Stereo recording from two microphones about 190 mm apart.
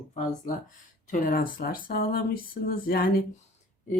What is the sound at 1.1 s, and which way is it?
Speech, 45° left (ahead or behind).